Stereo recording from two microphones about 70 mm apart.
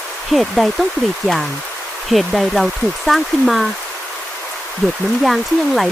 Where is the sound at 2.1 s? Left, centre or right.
Centre.